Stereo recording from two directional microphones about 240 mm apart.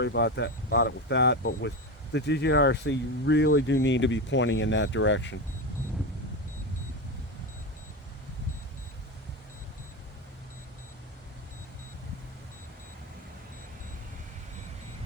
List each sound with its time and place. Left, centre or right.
0.0 s speech: left